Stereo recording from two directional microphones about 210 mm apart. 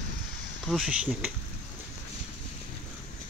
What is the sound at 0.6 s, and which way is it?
Speech, centre (ahead or behind).